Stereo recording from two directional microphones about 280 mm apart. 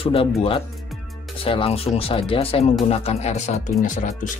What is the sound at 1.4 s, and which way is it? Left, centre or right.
Speech, centre.